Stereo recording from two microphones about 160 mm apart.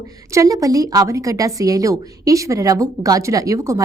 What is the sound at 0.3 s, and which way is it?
Speech, 20° right (ahead or behind).